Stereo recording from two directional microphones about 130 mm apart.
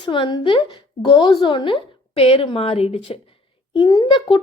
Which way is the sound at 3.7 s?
35° left (ahead or behind).